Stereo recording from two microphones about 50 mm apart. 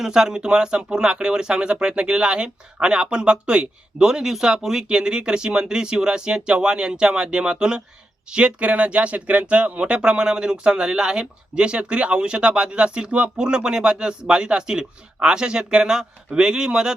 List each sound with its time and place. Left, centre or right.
0.0 s speech: centre